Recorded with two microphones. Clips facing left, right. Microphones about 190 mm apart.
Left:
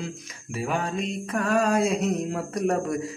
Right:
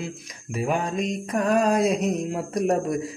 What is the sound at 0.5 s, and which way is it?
Music, 40° right (ahead or behind).